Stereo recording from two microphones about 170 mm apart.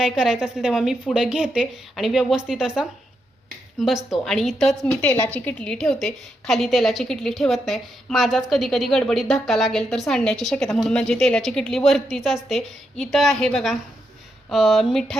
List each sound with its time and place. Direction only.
0.0 s a woman's voice: 5° right (ahead or behind)
3.8 s a woman's voice: centre (ahead or behind)
5.0 s a woman's voice: 20° left (ahead or behind)
5.3 s a woman's voice: 10° left (ahead or behind)